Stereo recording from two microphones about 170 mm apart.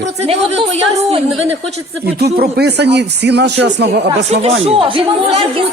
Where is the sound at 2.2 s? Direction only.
70° right (ahead or behind).